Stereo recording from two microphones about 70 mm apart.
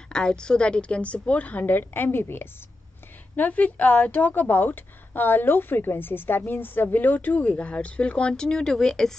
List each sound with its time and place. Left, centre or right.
0.1 s a woman's voice: centre; by 2.4 s left
3.3 s a woman's voice: left; by 9.1 s centre